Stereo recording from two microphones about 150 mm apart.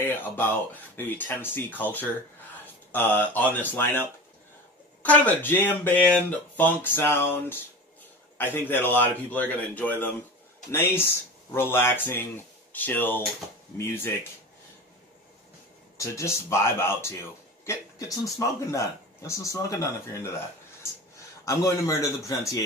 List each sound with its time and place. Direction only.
0.0 s speech: 15° left (ahead or behind)
5.0 s speech: 10° left (ahead or behind)
16.0 s a man's voice: 20° left (ahead or behind)
21.5 s a man's voice: 20° left (ahead or behind)